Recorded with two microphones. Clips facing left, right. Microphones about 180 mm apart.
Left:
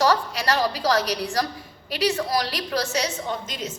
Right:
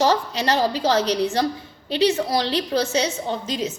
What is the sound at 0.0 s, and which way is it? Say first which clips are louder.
A woman's voice: right 2 dB; 20° right (ahead or behind).